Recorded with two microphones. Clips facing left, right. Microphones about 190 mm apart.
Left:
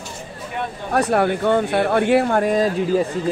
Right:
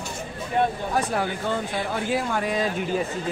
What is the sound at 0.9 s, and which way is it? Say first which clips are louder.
Speech: left 7 dB; 65° left (ahead or behind).